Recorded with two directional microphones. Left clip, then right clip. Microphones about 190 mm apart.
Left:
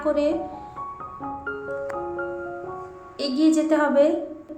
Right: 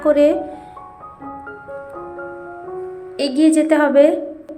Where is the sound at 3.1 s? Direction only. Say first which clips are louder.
Right 6 dB; 30° right (ahead or behind).